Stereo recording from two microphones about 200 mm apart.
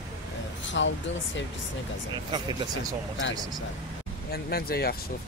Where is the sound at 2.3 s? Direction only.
20° right (ahead or behind).